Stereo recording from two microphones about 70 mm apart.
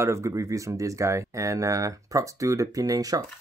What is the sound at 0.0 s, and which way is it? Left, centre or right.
Speech, right.